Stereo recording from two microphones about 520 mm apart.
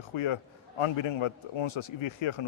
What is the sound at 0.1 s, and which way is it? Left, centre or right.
A man's voice, left.